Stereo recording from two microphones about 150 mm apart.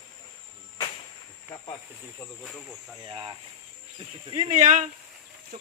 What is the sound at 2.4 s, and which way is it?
Speech, centre (ahead or behind).